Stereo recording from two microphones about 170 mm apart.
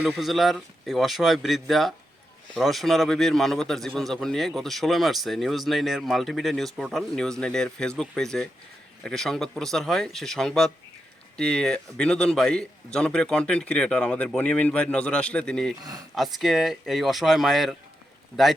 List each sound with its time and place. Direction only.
0.2 s a man's voice: centre (ahead or behind)
15.8 s speech: 20° right (ahead or behind)
16.1 s a man's voice: centre (ahead or behind)